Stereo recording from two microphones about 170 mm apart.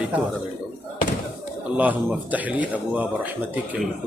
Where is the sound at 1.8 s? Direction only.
10° right (ahead or behind).